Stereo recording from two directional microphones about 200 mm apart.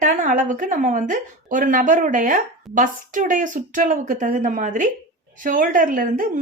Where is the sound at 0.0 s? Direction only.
40° right (ahead or behind).